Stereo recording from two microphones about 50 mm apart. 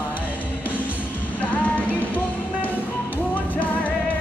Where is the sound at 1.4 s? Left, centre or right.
Left.